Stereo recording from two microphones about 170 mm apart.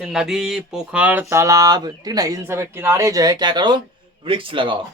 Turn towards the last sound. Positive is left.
turn(degrees=-30)  # may be behind; listen again after turning